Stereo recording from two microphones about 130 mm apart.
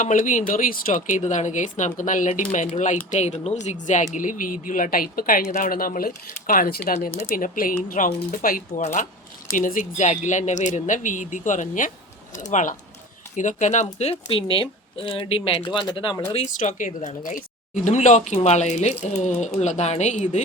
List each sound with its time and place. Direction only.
0.0 s speech: 90° left; by 9.0 s 70° left (ahead or behind)
9.6 s speech: 85° left; by 14.2 s 60° left (ahead or behind)
14.3 s speech: 40° left (ahead or behind)
16.5 s speech: 85° left
17.8 s speech: 65° left (ahead or behind)